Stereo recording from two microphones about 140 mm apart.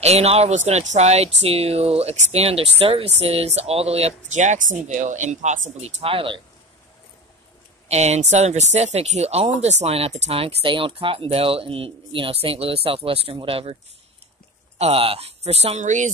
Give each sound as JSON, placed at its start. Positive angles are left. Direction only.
{"t": 0.0, "sound": "speech", "side_deg": -50}
{"t": 7.9, "sound": "speech", "side_deg": -50}
{"t": 14.8, "sound": "speech", "side_deg": -45}